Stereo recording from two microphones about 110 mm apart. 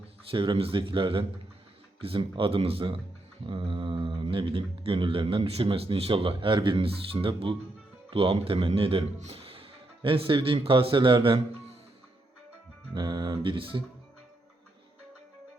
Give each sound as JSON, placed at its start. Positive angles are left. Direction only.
{"t": 0.3, "sound": "a man's voice", "side_deg": -55}
{"t": 12.9, "sound": "speech", "side_deg": -40}